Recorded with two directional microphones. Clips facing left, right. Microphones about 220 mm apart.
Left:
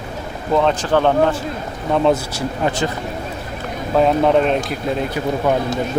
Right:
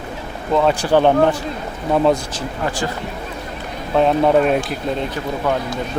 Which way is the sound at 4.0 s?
Centre (ahead or behind).